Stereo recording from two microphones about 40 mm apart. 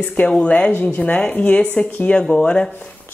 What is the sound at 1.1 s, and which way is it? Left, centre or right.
Speech, left.